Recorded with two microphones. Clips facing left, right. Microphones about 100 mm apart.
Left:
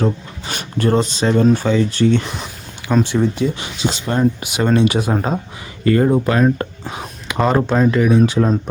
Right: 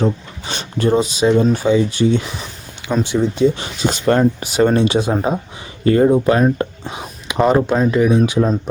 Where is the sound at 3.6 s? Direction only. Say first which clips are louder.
Right 4 dB; 50° right (ahead or behind).